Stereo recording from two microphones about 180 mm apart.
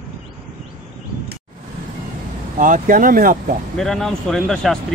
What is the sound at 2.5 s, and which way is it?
Speech, 50° right (ahead or behind).